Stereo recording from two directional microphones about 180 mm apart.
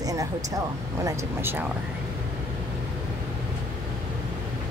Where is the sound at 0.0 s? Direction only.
20° right (ahead or behind).